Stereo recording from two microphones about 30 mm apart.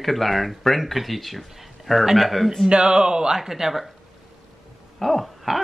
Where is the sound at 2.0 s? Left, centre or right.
Centre.